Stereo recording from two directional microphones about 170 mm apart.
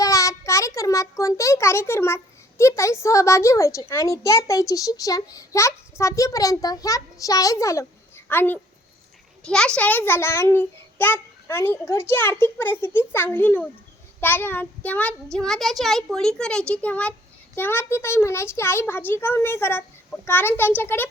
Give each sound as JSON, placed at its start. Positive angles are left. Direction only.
{"t": 0.0, "sound": "a child's voice", "side_deg": 20}